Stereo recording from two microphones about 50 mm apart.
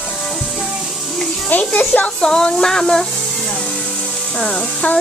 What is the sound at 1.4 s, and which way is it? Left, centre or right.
Speech, left.